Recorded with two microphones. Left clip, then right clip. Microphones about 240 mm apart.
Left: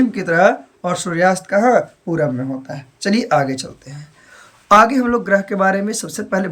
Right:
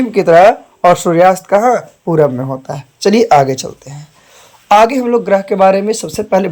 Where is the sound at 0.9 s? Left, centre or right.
Centre.